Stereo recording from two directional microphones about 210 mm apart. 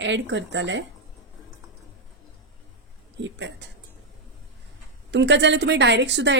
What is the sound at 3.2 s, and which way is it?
Speech, 60° right (ahead or behind).